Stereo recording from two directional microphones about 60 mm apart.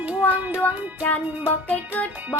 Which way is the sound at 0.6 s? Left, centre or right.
Left.